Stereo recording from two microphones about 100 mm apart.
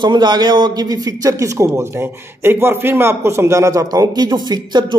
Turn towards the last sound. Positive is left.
turn(degrees=-45)  # may be behind; listen again after turning